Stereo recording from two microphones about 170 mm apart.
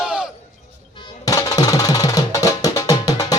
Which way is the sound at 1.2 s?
20° left (ahead or behind).